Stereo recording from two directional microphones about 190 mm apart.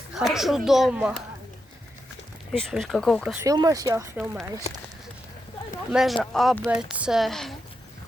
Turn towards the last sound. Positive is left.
turn(degrees=0)  # may be behind; listen again after turning